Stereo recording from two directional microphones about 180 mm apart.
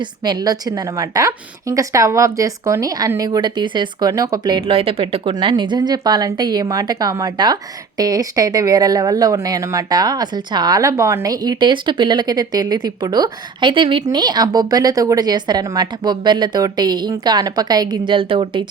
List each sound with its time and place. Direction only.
0.0 s a woman's voice: 25° right (ahead or behind)